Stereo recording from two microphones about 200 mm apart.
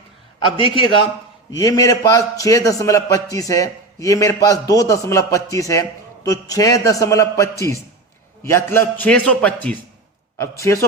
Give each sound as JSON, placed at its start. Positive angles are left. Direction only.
{"t": 0.4, "sound": "a man's voice", "side_deg": 25}